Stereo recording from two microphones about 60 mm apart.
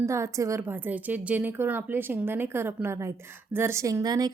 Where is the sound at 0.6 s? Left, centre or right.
Right.